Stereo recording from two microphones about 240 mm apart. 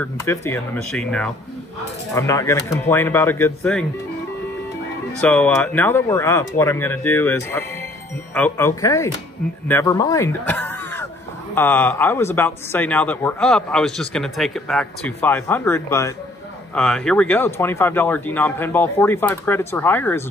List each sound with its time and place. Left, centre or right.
0.0 s speech: centre
5.2 s speech: centre